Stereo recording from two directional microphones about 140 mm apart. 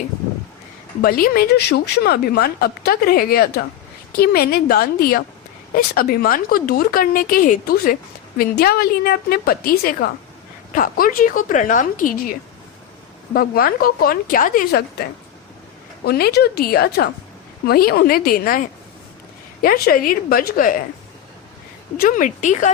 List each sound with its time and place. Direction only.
1.0 s a woman's voice: 90° left
8.4 s a woman's voice: 90° left
13.3 s a woman's voice: 90° left
16.0 s a woman's voice: 90° left
19.6 s a woman's voice: 90° left
21.9 s speech: 80° left; by 22.7 s 60° left (ahead or behind)